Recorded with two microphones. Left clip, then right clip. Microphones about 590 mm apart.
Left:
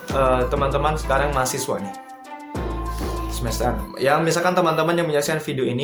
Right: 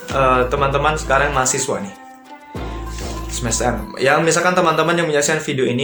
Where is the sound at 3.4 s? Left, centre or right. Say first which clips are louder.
Right 5 dB; left.